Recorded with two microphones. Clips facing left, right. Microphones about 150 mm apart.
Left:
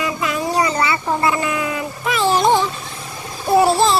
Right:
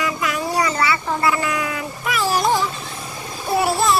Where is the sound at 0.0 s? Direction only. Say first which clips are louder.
Left 2 dB; 25° left (ahead or behind).